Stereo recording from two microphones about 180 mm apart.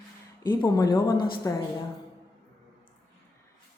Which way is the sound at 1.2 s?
55° left (ahead or behind).